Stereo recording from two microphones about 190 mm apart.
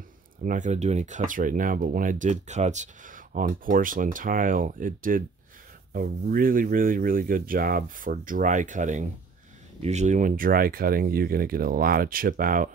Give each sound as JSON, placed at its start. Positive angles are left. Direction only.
{"t": 0.4, "sound": "speech", "side_deg": -40}